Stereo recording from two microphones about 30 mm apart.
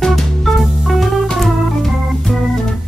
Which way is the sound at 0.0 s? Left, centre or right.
Centre.